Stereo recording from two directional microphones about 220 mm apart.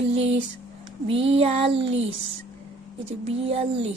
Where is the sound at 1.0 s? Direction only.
25° right (ahead or behind).